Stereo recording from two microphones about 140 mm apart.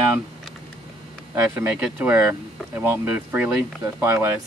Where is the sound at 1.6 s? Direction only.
10° right (ahead or behind).